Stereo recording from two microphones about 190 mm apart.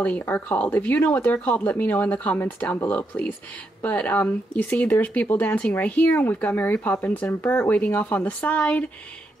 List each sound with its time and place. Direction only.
0.0 s speech: 10° left (ahead or behind)